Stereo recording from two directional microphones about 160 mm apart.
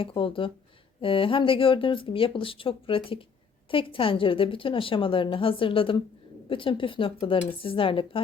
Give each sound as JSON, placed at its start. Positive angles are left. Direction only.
{"t": 0.0, "sound": "a woman's voice", "side_deg": 35}